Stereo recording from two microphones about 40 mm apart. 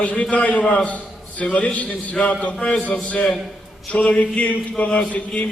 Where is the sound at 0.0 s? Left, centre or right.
Left.